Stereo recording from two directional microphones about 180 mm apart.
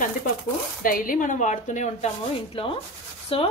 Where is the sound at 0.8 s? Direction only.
50° left (ahead or behind).